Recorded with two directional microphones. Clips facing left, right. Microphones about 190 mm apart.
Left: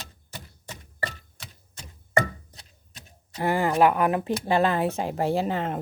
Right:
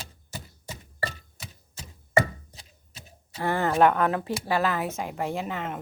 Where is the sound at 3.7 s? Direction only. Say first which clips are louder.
Right 1 dB; 10° left (ahead or behind).